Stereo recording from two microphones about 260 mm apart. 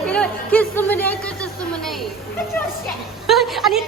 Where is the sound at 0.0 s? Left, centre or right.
Centre.